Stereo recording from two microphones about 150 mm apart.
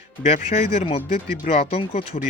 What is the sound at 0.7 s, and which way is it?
Speech, 40° left (ahead or behind).